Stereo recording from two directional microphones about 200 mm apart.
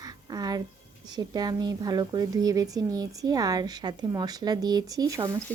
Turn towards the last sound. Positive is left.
turn(degrees=-15)  # may be behind; listen again after turning